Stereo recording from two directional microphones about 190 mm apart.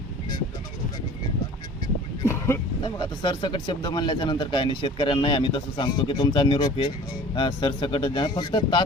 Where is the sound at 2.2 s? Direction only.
15° left (ahead or behind).